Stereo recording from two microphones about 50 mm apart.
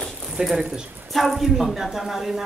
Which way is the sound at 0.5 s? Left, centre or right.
Centre.